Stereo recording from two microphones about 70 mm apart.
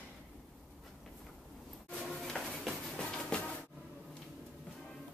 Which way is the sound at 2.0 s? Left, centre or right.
Centre.